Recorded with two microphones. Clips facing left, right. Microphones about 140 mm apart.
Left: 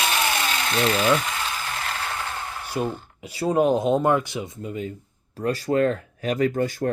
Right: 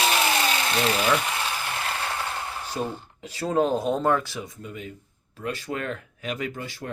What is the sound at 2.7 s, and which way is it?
Speech, 10° left (ahead or behind).